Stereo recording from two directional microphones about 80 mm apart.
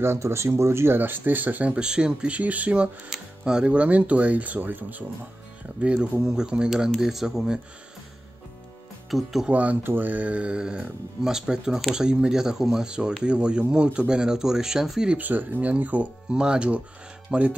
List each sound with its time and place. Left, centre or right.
0.0 s speech: right; by 7.6 s centre
9.1 s speech: centre
9.5 s speech: centre
15.1 s speech: right